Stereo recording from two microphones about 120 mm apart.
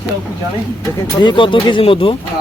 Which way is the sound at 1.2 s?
40° left (ahead or behind).